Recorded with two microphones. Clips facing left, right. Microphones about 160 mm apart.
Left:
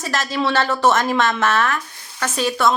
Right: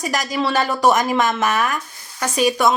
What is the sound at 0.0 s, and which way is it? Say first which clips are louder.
Speech: even; 15° right (ahead or behind).